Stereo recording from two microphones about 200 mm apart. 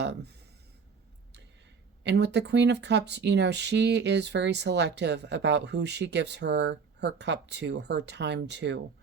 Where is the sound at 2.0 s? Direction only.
60° right (ahead or behind).